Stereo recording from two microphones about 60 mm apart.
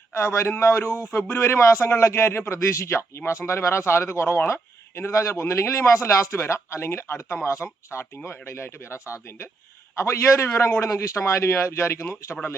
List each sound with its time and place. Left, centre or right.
0.1 s speech: left